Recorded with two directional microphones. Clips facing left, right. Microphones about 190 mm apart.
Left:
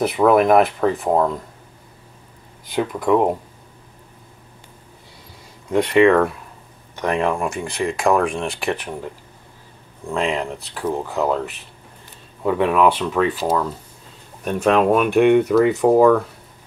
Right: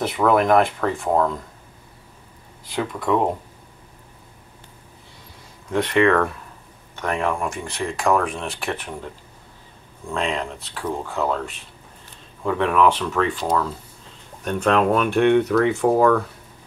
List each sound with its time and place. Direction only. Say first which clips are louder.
0.3 s speech: left 2 dB; 5° left (ahead or behind)
0.7 s speech: left 3 dB; 15° left (ahead or behind)
2.7 s speech: left 4 dB; 10° left (ahead or behind)
5.7 s speech: left 4 dB; 10° left (ahead or behind)
10.1 s speech: left 3 dB; 10° left (ahead or behind)
12.4 s speech: left 2 dB; 10° left (ahead or behind)